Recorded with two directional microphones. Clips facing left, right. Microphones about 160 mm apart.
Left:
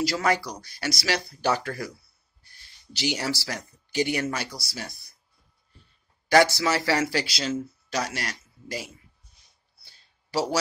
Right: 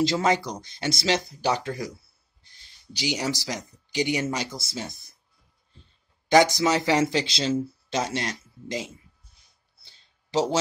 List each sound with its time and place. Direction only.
0.0 s speech: 25° right (ahead or behind)
6.2 s speech: 15° right (ahead or behind)
9.8 s a sound: 20° right (ahead or behind)